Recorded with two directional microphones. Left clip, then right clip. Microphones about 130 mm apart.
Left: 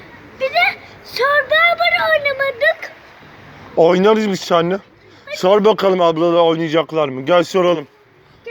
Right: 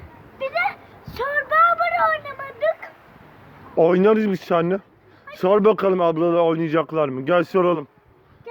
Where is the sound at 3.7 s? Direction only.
70° right (ahead or behind).